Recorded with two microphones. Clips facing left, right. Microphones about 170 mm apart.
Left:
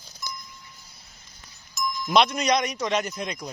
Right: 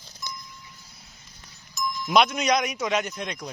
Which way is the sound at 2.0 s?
5° right (ahead or behind).